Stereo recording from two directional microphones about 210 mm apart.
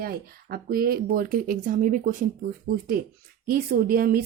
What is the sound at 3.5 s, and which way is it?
Speech, 45° right (ahead or behind).